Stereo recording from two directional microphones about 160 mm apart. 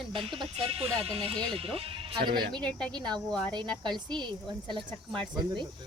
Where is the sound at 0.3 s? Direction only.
35° right (ahead or behind).